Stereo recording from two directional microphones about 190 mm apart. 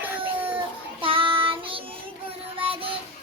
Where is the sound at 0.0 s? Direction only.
10° right (ahead or behind).